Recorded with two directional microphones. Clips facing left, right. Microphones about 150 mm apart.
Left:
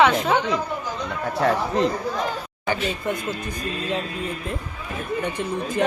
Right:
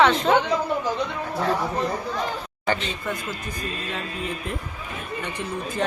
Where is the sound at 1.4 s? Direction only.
90° left.